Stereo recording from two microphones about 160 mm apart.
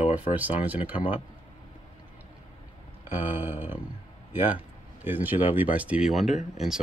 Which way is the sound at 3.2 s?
10° right (ahead or behind).